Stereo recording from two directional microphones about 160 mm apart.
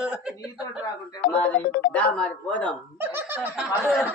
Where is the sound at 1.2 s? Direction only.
70° left (ahead or behind).